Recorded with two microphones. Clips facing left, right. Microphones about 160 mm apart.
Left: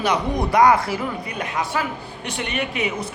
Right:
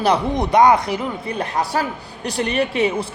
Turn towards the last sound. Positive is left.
turn(degrees=-30)  # may be behind; listen again after turning